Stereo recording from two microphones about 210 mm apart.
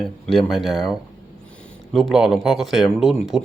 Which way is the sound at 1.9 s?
Centre (ahead or behind).